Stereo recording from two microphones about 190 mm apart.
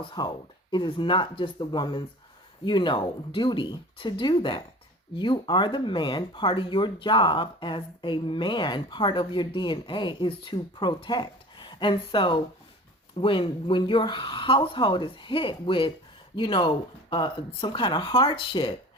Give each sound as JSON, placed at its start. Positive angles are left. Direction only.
{"t": 0.0, "sound": "speech", "side_deg": 25}